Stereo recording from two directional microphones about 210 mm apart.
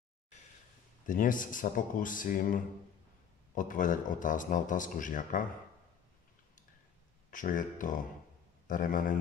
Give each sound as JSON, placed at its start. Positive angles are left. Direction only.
{"t": 1.0, "sound": "speech", "side_deg": 40}
{"t": 7.2, "sound": "speech", "side_deg": 40}
{"t": 8.6, "sound": "speech", "side_deg": 40}